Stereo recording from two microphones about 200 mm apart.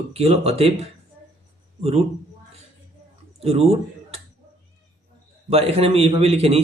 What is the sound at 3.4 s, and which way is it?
Speech, 30° right (ahead or behind).